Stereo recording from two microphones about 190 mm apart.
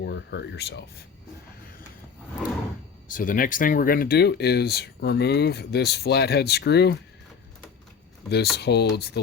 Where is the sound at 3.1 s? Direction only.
45° left (ahead or behind); by 7.0 s 60° left (ahead or behind).